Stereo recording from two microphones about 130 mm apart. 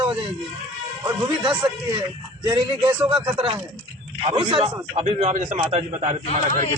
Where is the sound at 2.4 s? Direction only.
35° right (ahead or behind); by 5.6 s 70° right (ahead or behind).